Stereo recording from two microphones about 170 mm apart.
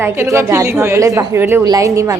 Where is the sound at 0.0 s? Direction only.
15° right (ahead or behind).